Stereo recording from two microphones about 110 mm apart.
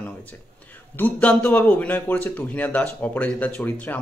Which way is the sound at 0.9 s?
15° left (ahead or behind).